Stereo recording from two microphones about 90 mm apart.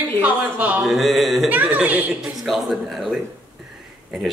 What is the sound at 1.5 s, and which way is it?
Speech, 20° right (ahead or behind).